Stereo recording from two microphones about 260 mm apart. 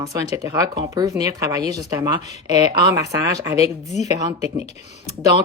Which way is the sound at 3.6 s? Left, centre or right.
Left.